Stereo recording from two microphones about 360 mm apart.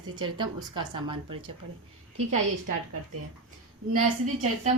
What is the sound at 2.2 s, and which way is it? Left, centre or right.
Speech, right.